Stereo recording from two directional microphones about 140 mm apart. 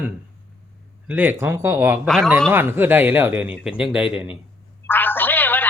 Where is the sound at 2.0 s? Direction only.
5° left (ahead or behind).